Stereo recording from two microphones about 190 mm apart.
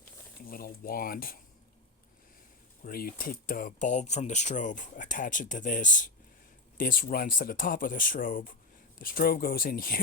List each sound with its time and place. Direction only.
0.4 s speech: 50° left (ahead or behind)
2.8 s speech: 50° left (ahead or behind)